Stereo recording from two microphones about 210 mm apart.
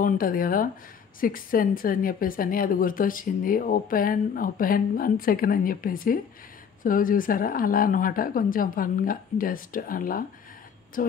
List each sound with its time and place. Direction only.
0.0 s a woman's voice: 40° left (ahead or behind)